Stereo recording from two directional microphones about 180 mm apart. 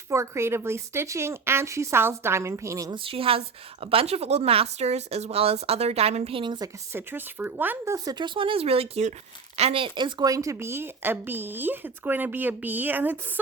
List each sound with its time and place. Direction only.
0.1 s speech: 15° right (ahead or behind)
3.0 s a woman's voice: 30° right (ahead or behind)
6.9 s speech: 10° right (ahead or behind)